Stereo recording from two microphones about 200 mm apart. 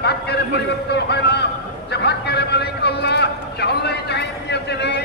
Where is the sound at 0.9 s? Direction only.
55° left (ahead or behind).